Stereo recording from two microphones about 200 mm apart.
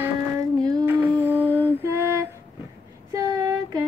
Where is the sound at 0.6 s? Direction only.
15° right (ahead or behind).